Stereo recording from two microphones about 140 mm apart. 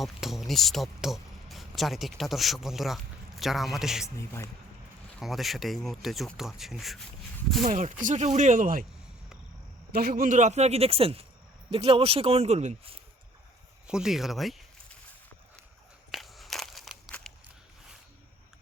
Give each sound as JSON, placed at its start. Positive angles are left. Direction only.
{"t": 0.0, "sound": "speech", "side_deg": 0}
{"t": 4.0, "sound": "a man's voice", "side_deg": 20}
{"t": 5.2, "sound": "speech", "side_deg": 0}
{"t": 7.6, "sound": "speech", "side_deg": -65}
{"t": 10.0, "sound": "a man's voice", "side_deg": -90}
{"t": 13.8, "sound": "speech", "side_deg": -5}
{"t": 16.1, "sound": "crushing", "side_deg": 0}
{"t": 17.1, "sound": "biting", "side_deg": 5}